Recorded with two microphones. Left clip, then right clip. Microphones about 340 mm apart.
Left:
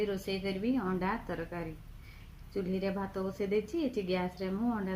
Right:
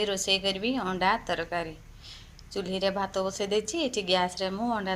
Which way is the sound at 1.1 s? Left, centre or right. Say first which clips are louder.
Right 9 dB; right.